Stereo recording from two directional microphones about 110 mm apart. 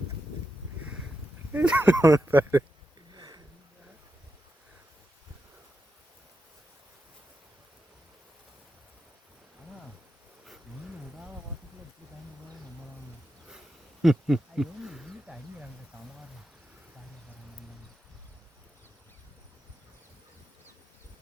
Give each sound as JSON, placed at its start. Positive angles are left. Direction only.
{"t": 1.5, "sound": "speech", "side_deg": -15}
{"t": 2.0, "sound": "speech", "side_deg": -25}
{"t": 3.2, "sound": "a sound", "side_deg": -35}
{"t": 14.0, "sound": "wild animals", "side_deg": -5}